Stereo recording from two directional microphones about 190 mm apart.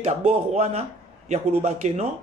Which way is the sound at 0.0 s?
35° right (ahead or behind).